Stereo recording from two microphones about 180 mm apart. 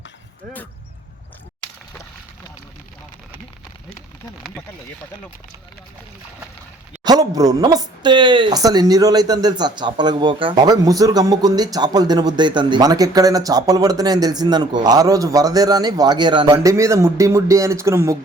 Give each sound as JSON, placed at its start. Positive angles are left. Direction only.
{"t": 7.0, "sound": "speech", "side_deg": -20}